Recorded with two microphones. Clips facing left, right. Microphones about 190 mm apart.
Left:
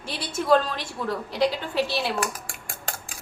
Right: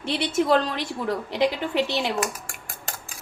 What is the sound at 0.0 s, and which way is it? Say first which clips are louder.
A woman's voice: right 7 dB; 20° right (ahead or behind).